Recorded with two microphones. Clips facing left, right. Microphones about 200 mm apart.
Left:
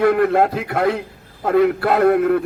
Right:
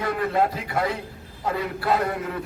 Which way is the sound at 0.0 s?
60° left (ahead or behind).